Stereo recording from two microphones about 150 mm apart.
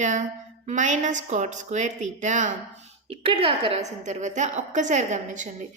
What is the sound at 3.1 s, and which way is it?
A woman's voice, 40° right (ahead or behind).